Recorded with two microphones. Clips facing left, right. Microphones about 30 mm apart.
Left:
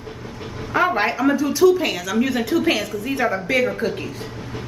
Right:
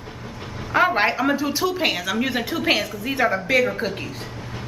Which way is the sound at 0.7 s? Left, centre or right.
Centre.